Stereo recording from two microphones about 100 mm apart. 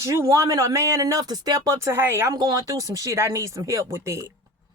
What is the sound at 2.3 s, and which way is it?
Speech, 40° right (ahead or behind).